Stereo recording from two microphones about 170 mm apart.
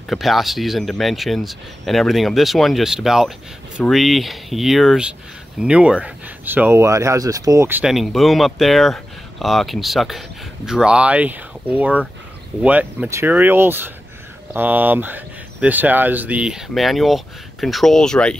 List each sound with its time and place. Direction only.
0.1 s speech: centre (ahead or behind)
7.9 s speech: centre (ahead or behind)